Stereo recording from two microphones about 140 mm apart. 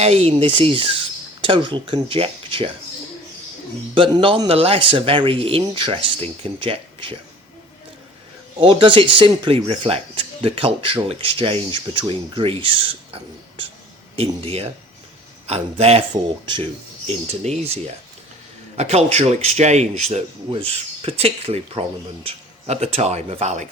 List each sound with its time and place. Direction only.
0.0 s speech: 45° right (ahead or behind)
3.9 s speech: 40° right (ahead or behind)
8.5 s speech: 40° right (ahead or behind)
14.2 s speech: 45° right (ahead or behind)
17.4 s speech: 50° right (ahead or behind)